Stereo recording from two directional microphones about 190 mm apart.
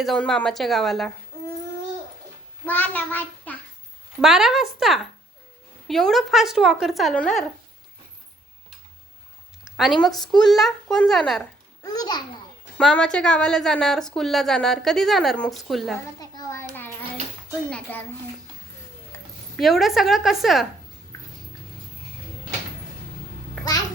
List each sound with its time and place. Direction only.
0.0 s a woman's voice: centre (ahead or behind)
2.6 s child singing: 10° left (ahead or behind)
4.2 s a woman's voice: 5° right (ahead or behind)
9.6 s a sound: centre (ahead or behind)
10.4 s a woman's voice: centre (ahead or behind)
11.8 s a child's voice: 20° left (ahead or behind)
12.7 s a woman's voice: 5° left (ahead or behind)
16.2 s a sound: 20° left (ahead or behind)
17.7 s a child's voice: 5° left (ahead or behind)
19.1 s a sound: 15° left (ahead or behind)
19.5 s a woman's voice: centre (ahead or behind)